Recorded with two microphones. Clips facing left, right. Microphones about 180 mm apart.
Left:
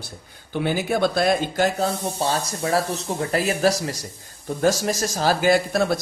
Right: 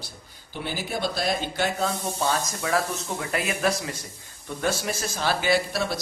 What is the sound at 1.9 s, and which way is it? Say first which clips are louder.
Speech: left 2 dB; 30° left (ahead or behind).